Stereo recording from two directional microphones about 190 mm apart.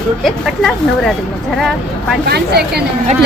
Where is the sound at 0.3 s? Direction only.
Centre (ahead or behind).